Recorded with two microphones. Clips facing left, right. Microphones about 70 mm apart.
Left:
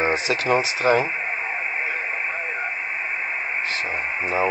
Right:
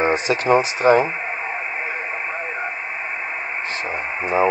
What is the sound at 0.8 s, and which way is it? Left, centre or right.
Speech, right.